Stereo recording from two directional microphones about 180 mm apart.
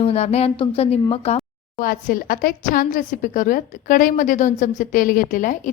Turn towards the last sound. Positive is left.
turn(degrees=45)  # may be behind; listen again after turning